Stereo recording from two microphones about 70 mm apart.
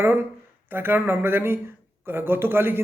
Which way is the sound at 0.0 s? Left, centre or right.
Right.